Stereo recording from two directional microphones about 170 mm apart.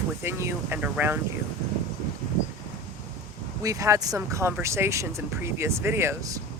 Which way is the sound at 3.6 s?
20° right (ahead or behind).